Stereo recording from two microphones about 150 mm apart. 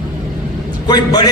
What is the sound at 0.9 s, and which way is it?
Speech, 30° left (ahead or behind).